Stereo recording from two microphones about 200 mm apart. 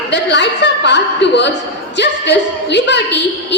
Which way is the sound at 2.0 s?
60° left (ahead or behind).